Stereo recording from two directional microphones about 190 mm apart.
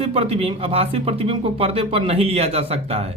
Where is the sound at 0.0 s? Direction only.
30° right (ahead or behind).